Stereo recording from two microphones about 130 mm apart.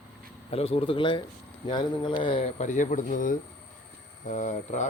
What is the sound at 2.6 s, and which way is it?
Speech, 70° left (ahead or behind).